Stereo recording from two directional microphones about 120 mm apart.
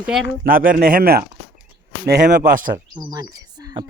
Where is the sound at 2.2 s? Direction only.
90° right.